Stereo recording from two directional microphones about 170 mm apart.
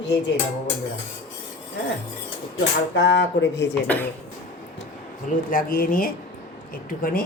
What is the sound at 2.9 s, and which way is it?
Speech, 90° left.